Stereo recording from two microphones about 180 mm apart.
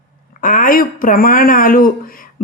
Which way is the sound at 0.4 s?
50° left (ahead or behind).